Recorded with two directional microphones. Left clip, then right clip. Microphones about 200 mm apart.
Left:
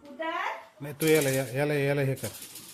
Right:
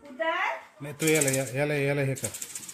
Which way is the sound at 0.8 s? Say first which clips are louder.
Left 2 dB; centre (ahead or behind).